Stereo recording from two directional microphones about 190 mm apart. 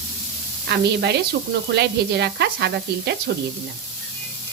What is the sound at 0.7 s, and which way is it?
Sizzle, 60° right (ahead or behind).